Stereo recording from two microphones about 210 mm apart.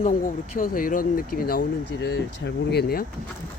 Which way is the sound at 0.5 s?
40° left (ahead or behind).